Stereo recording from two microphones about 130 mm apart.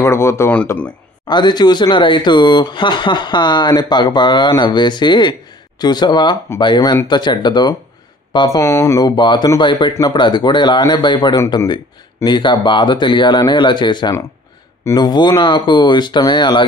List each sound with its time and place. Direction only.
0.0 s speech: 20° left (ahead or behind)
1.2 s a man's voice: 35° left (ahead or behind)
8.5 s speech: 20° left (ahead or behind)
9.1 s a man's voice: 35° left (ahead or behind)